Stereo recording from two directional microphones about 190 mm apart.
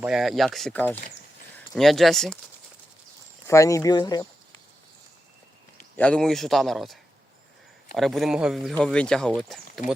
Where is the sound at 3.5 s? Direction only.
15° left (ahead or behind).